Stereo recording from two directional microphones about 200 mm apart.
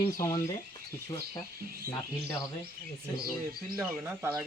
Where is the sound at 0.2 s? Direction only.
15° left (ahead or behind).